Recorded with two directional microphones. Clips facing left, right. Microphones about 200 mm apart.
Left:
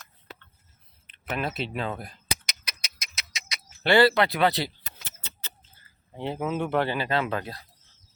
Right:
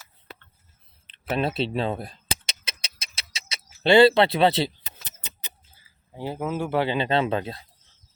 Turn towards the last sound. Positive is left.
turn(degrees=-25)  # may be behind; listen again after turning